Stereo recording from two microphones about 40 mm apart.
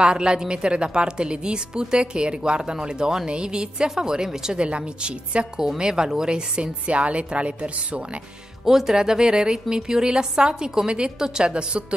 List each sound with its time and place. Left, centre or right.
0.0 s a woman's voice: right
4.6 s a woman's voice: right
8.6 s a woman's voice: centre